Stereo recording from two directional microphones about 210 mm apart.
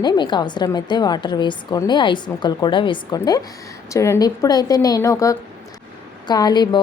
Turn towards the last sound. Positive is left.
turn(degrees=20)  # may be behind; listen again after turning